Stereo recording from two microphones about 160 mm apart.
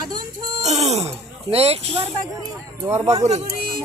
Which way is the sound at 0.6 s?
45° right (ahead or behind).